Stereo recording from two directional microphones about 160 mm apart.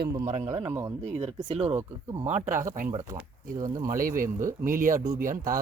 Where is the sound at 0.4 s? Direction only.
20° right (ahead or behind).